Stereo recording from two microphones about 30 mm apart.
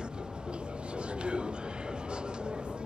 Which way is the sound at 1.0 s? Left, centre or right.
Right.